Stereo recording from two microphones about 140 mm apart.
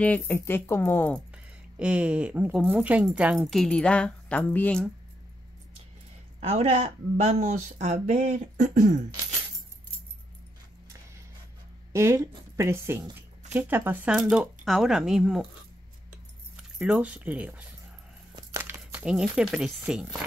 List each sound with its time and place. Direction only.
0.0 s speech: 15° left (ahead or behind)
1.3 s speech: 10° right (ahead or behind); by 4.8 s 10° left (ahead or behind)
6.4 s speech: 50° right (ahead or behind); by 8.9 s 70° right (ahead or behind)
11.9 s speech: 20° right (ahead or behind); by 15.4 s 5° right (ahead or behind)
16.5 s speech: 10° right (ahead or behind)